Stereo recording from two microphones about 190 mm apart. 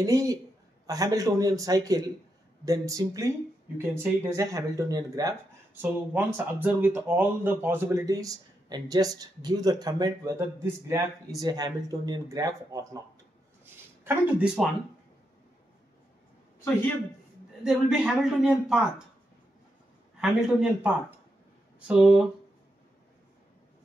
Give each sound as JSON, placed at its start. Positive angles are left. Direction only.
{"t": 0.0, "sound": "speech", "side_deg": -20}
{"t": 14.0, "sound": "a man's voice", "side_deg": -5}
{"t": 17.6, "sound": "a man's voice", "side_deg": -5}
{"t": 20.2, "sound": "a man's voice", "side_deg": -5}